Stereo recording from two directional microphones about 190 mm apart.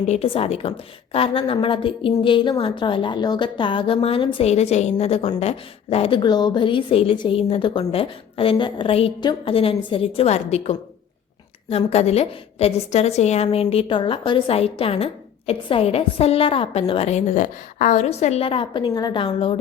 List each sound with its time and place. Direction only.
0.0 s a woman's voice: 35° left (ahead or behind)
11.9 s a woman's voice: 35° left (ahead or behind)